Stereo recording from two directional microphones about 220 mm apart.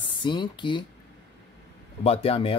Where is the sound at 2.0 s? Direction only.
25° left (ahead or behind).